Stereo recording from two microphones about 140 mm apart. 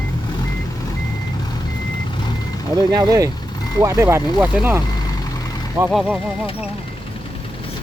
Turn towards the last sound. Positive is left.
turn(degrees=0)  # may be behind; listen again after turning